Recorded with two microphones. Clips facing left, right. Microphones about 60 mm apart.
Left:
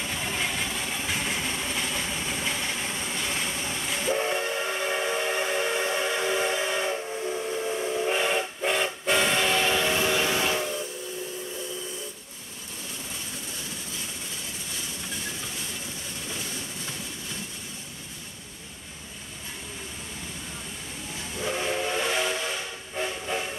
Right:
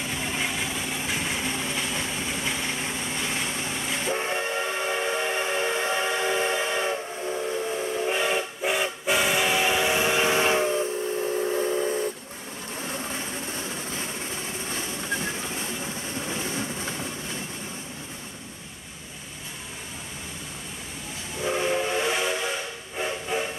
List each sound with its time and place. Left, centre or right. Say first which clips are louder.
0.0 s vehicle: right 1 dB; centre
4.2 s steam whistle: even; right
4.6 s steam whistle: right 1 dB; centre
5.3 s steam whistle: right 1 dB; right
12.8 s vehicle: right 7 dB; right
15.5 s train: right 5 dB; right
21.4 s steam whistle: right 3 dB; centre
22.9 s train: right 2 dB; centre